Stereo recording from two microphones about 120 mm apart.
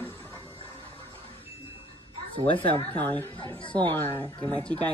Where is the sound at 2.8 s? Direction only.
15° left (ahead or behind).